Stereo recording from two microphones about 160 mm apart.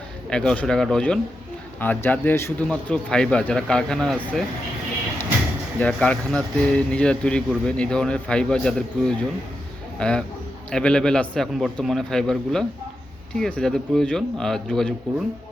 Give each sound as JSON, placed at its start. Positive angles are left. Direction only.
{"t": 0.3, "sound": "a man's voice", "side_deg": 5}
{"t": 5.8, "sound": "a man's voice", "side_deg": 5}